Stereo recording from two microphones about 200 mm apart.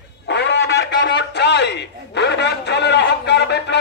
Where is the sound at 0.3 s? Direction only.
60° left (ahead or behind).